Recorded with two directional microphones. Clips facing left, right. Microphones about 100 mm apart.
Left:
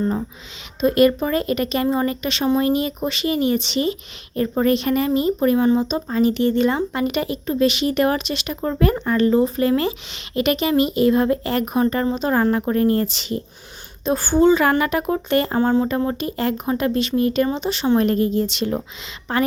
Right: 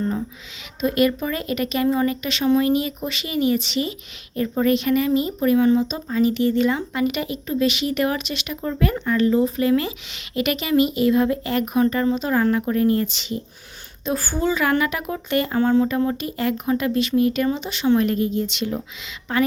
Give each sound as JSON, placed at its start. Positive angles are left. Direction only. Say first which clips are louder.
{"t": 0.8, "sound": "speech", "louder": "left 4 dB", "side_deg": 40}
{"t": 14.0, "sound": "speech", "louder": "left 7 dB", "side_deg": 25}